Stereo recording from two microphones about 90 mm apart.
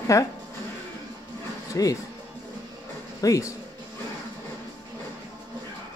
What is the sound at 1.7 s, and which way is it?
Speech, 35° left (ahead or behind).